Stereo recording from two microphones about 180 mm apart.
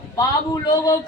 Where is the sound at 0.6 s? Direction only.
20° left (ahead or behind).